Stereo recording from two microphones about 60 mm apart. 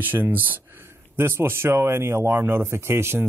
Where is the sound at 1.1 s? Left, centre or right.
Right.